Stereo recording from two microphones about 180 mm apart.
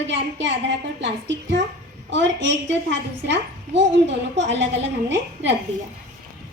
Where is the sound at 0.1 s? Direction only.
85° right.